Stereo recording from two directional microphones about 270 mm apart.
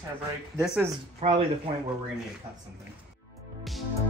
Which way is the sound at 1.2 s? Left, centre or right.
Right.